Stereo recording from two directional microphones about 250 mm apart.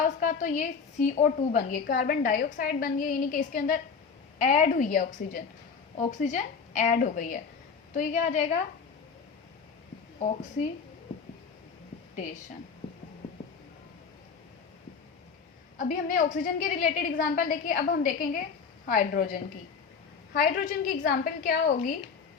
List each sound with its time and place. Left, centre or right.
0.0 s a woman's voice: left
12.1 s speech: left
15.8 s a woman's voice: left